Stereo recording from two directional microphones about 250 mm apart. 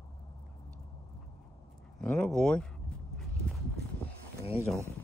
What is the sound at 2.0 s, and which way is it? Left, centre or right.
Speech, centre.